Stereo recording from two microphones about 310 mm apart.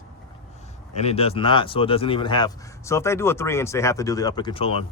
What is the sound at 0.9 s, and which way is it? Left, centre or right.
Speech, centre.